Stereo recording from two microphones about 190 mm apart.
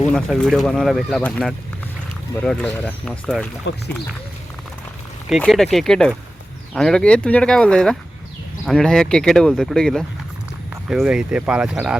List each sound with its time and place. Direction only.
0.1 s speech: centre (ahead or behind)
3.7 s speech: 65° left (ahead or behind)
5.3 s speech: centre (ahead or behind)